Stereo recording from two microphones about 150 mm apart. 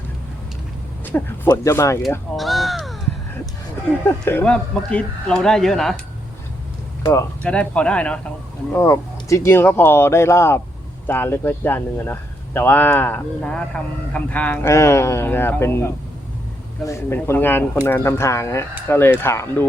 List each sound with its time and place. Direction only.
1.1 s speech: 15° left (ahead or behind)
2.0 s speech: centre (ahead or behind)
4.0 s speech: 15° left (ahead or behind)
7.0 s speech: 20° left (ahead or behind)
7.4 s speech: 5° left (ahead or behind)
8.7 s speech: 20° left (ahead or behind)